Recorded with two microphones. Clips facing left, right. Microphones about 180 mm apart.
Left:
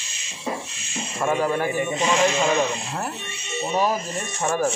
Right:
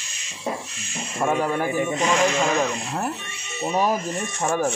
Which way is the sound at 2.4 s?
Centre (ahead or behind).